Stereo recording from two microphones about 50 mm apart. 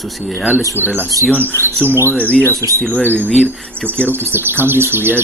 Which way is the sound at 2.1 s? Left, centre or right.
Left.